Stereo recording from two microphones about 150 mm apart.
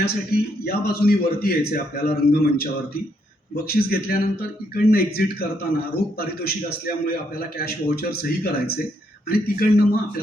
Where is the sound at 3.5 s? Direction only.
90° left.